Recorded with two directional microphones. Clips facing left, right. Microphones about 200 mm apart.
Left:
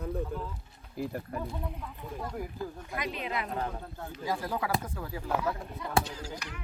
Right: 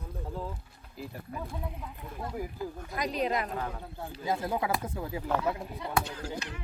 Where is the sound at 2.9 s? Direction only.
40° right (ahead or behind).